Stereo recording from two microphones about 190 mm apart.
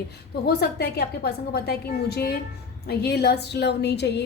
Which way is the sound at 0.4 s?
55° left (ahead or behind).